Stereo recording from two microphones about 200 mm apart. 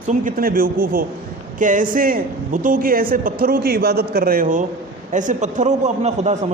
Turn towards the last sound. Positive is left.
turn(degrees=-35)  # may be behind; listen again after turning